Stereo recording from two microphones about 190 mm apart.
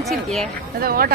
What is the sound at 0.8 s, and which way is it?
Speech, 50° right (ahead or behind).